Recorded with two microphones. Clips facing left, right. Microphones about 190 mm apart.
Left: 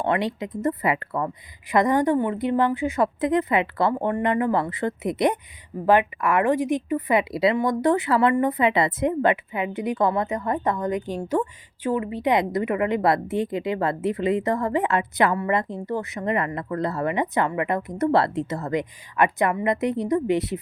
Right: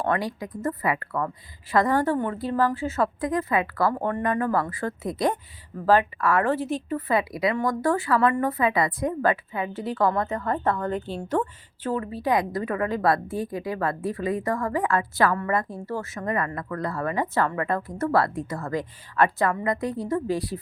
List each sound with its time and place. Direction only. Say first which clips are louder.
0.0 s a woman's voice: left 2 dB; 20° left (ahead or behind)